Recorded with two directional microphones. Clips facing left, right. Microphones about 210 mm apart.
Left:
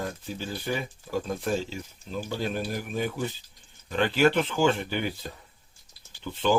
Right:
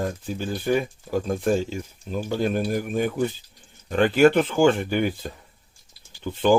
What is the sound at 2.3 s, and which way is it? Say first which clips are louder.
Speech: right 7 dB; 50° right (ahead or behind).